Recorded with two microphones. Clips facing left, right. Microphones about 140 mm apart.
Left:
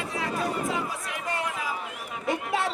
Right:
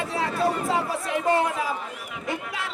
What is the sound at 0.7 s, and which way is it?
Speech, 30° right (ahead or behind).